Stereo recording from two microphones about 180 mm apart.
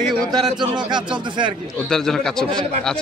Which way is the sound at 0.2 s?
25° right (ahead or behind).